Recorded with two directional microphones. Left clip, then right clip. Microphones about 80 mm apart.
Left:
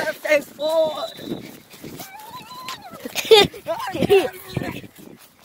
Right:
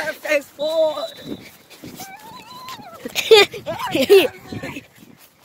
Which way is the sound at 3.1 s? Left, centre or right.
Right.